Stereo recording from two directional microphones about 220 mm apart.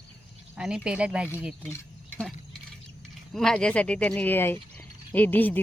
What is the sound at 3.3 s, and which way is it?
Speech, centre (ahead or behind).